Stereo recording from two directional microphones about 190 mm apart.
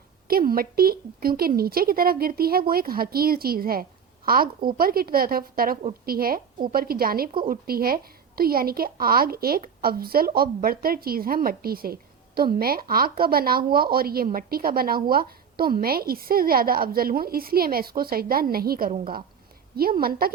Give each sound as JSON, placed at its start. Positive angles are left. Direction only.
{"t": 0.3, "sound": "a woman's voice", "side_deg": -50}